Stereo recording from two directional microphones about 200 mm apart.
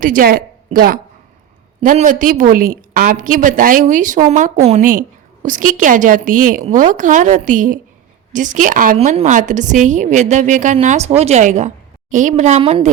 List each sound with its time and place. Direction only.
0.0 s a woman's voice: 45° right (ahead or behind)